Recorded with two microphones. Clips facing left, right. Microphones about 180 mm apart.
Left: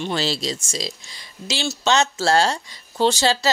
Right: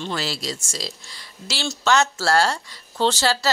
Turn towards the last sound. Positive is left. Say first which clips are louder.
# left 2 dB
turn(degrees=15)  # may be behind; listen again after turning